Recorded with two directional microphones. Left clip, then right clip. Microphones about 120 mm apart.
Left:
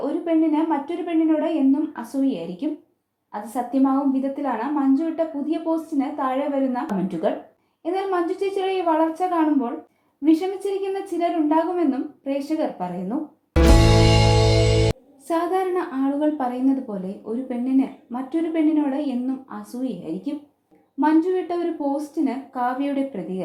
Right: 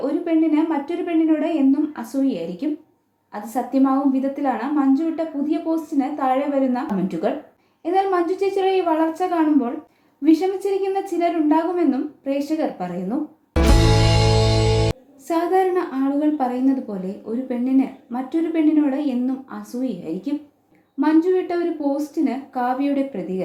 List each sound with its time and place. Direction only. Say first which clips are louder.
0.0 s a woman's voice: right 1 dB; 25° left (ahead or behind)
13.5 s music: left 1 dB; centre (ahead or behind)
15.3 s a woman's voice: right 3 dB; 30° left (ahead or behind)
21.0 s a woman's voice: right 2 dB; 25° left (ahead or behind)